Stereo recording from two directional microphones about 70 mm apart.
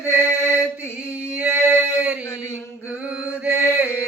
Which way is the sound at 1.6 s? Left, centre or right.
Left.